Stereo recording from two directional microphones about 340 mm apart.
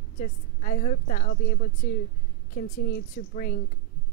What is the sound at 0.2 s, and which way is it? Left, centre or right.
A woman's voice, left.